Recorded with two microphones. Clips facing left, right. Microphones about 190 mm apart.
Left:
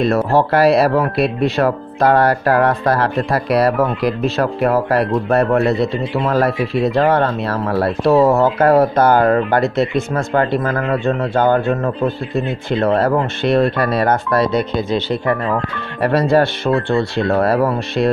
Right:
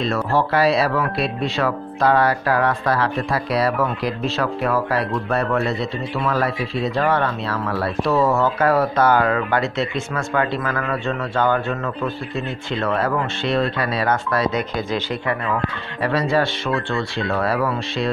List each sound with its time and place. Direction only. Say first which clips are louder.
0.0 s speech: left 6 dB; 55° left (ahead or behind)
6.1 s speech: left 5 dB; 35° left (ahead or behind)
11.3 s speech: left 5 dB; 45° left (ahead or behind)
13.4 s speech: left 6 dB; 50° left (ahead or behind)
16.0 s speech: left 6 dB; 60° left (ahead or behind)
16.6 s speech: left 7 dB; 35° left (ahead or behind)